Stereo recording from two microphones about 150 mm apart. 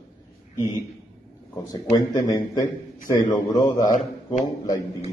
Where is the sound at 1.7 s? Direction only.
25° left (ahead or behind).